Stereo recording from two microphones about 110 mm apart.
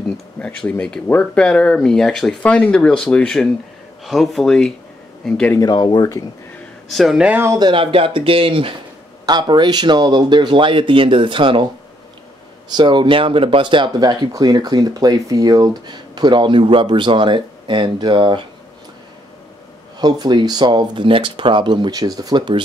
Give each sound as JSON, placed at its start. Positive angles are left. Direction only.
{"t": 0.4, "sound": "speech", "side_deg": 15}
{"t": 5.6, "sound": "speech", "side_deg": 40}
{"t": 6.9, "sound": "speech", "side_deg": 0}
{"t": 7.2, "sound": "speech", "side_deg": -20}
{"t": 7.5, "sound": "speech", "side_deg": -45}
{"t": 9.2, "sound": "speech", "side_deg": -40}
{"t": 12.7, "sound": "speech", "side_deg": -45}
{"t": 20.0, "sound": "speech", "side_deg": -40}